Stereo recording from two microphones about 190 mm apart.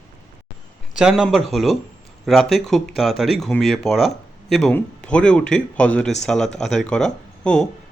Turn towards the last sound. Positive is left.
turn(degrees=5)  # may be behind; listen again after turning